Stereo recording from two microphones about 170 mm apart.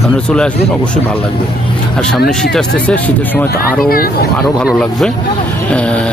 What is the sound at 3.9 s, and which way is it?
Speech, 60° left (ahead or behind).